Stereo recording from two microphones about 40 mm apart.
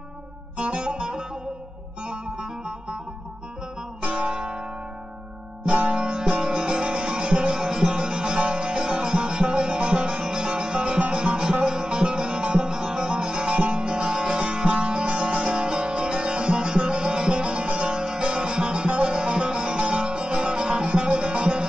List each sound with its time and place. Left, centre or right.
0.6 s music: right
4.0 s guitar: right
5.8 s music: right